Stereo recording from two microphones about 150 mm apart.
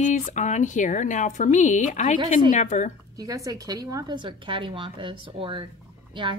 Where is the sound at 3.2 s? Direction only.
25° right (ahead or behind).